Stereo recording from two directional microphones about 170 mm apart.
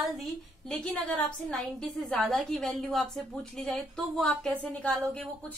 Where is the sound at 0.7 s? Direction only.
5° left (ahead or behind).